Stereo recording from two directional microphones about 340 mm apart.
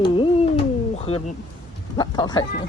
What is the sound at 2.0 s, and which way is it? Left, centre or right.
Speech, centre.